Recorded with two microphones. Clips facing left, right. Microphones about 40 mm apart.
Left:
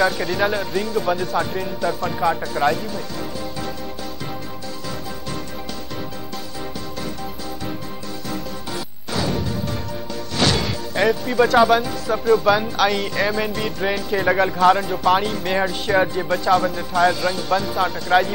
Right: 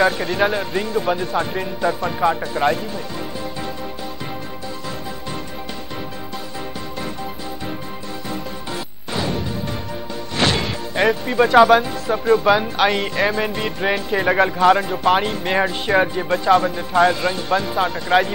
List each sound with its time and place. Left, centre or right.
0.0 s speech: centre
9.1 s music: centre
11.6 s speech: centre
15.5 s speech: centre